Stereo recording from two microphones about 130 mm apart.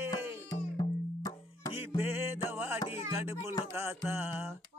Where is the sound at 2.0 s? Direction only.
20° right (ahead or behind).